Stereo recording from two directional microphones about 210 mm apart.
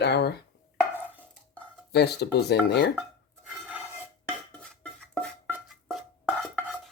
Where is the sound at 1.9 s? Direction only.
50° left (ahead or behind).